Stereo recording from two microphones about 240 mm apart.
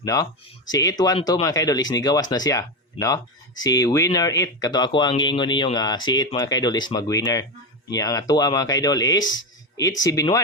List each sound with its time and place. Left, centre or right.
0.0 s speech: centre